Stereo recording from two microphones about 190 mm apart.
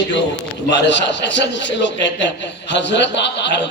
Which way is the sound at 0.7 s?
65° left (ahead or behind).